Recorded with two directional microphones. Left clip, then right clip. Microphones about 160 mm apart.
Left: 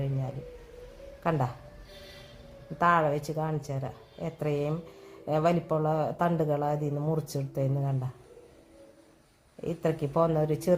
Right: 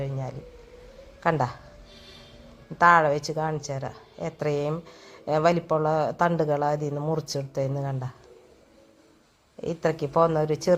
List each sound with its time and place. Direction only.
1.2 s speech: 15° right (ahead or behind)
2.7 s speech: 15° right (ahead or behind)
9.6 s speech: 10° right (ahead or behind)